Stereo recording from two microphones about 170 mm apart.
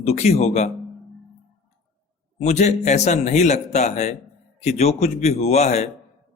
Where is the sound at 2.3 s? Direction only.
40° left (ahead or behind).